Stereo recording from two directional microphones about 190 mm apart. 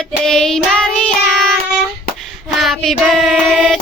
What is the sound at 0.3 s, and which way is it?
Child singing, centre (ahead or behind).